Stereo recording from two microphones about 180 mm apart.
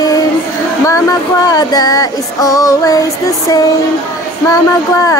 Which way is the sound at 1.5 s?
20° left (ahead or behind).